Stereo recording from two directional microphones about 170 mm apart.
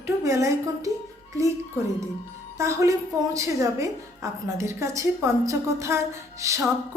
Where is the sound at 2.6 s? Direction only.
15° right (ahead or behind).